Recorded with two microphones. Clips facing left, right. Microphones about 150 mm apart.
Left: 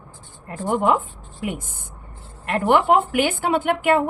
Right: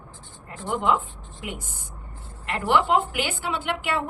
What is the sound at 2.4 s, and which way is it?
A woman's voice, 50° left (ahead or behind).